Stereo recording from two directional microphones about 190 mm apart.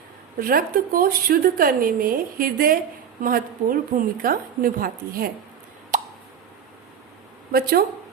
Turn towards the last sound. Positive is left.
turn(degrees=-50)  # may be behind; listen again after turning